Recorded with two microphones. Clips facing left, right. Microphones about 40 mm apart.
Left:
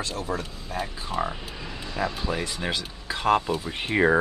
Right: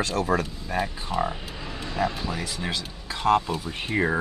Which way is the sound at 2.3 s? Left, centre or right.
Centre.